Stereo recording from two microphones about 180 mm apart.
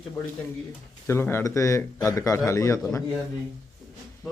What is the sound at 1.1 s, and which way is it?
A man's voice, 15° left (ahead or behind).